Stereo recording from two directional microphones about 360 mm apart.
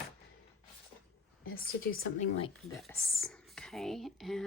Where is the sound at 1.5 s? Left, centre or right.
Left.